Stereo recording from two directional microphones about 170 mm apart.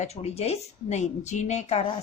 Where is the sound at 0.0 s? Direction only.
40° left (ahead or behind).